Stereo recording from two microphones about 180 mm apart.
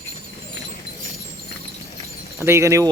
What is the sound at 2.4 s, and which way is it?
Speech, 15° right (ahead or behind).